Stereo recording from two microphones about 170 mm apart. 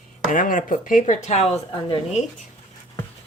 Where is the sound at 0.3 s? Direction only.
50° left (ahead or behind); by 2.0 s 35° left (ahead or behind).